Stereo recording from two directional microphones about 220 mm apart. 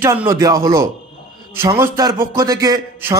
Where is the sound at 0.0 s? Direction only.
10° right (ahead or behind).